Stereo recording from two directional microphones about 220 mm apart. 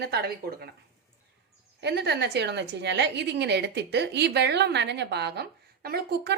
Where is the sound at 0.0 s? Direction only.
45° right (ahead or behind).